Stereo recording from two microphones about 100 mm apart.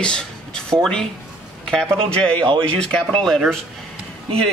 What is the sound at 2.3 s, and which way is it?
Speech, 55° right (ahead or behind).